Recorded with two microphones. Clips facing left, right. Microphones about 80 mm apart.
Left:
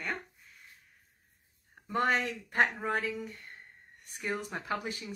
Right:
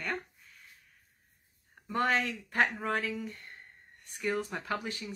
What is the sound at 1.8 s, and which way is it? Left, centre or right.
Speech, centre.